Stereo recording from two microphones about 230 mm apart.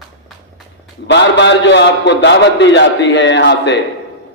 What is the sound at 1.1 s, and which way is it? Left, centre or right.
A man's voice, left.